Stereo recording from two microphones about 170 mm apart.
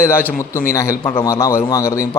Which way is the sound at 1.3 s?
15° left (ahead or behind).